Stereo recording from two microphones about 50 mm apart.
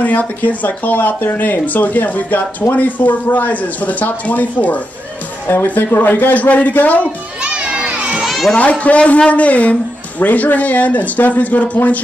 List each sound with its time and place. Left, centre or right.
0.0 s a man's voice: left
5.5 s a man's voice: left
7.4 s children playing: centre
8.3 s a sound: centre
8.5 s a man's voice: left